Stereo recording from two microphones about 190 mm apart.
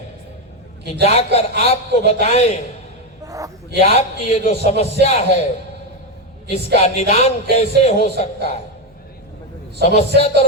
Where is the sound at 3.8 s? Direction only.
35° left (ahead or behind).